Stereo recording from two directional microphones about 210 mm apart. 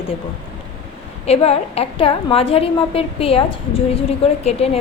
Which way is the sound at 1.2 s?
30° left (ahead or behind).